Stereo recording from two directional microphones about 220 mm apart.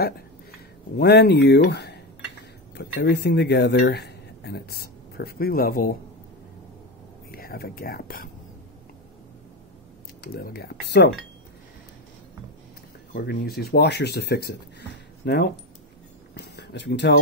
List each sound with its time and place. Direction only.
0.9 s speech: 45° left (ahead or behind)
7.2 s speech: 45° left (ahead or behind)
10.2 s speech: 45° left (ahead or behind)
13.1 s speech: 45° left (ahead or behind)